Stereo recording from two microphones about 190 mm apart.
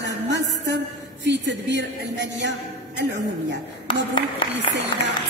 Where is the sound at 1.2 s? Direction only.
65° right (ahead or behind).